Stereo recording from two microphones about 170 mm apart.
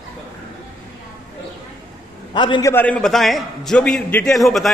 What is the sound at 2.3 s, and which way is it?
Speech, 25° left (ahead or behind).